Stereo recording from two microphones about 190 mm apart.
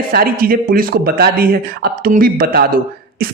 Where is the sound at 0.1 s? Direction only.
50° right (ahead or behind).